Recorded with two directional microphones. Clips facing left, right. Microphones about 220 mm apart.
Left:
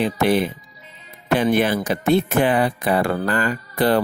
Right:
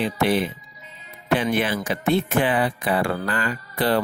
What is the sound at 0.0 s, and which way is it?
Speech, 45° left (ahead or behind).